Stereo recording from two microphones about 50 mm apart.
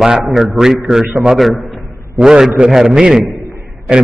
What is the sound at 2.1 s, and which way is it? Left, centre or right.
A man's voice, centre.